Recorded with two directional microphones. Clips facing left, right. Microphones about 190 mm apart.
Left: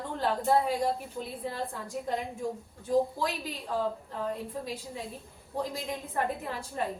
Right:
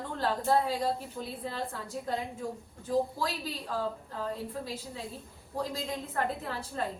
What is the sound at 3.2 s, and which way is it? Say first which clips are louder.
A woman's voice: left 1 dB; 15° left (ahead or behind).